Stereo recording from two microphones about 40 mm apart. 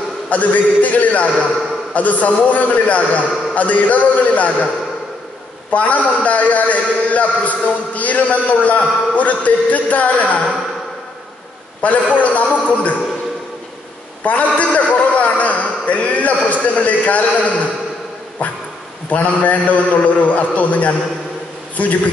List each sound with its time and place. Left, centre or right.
0.3 s a man's voice: left
5.7 s a man's voice: left
11.8 s a man's voice: left
14.2 s a man's voice: left
19.0 s a man's voice: left